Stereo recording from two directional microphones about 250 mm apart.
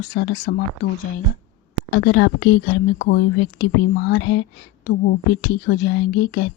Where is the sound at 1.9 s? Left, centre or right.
Left.